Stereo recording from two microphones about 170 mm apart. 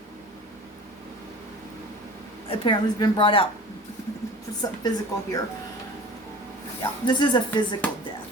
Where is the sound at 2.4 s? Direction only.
30° left (ahead or behind).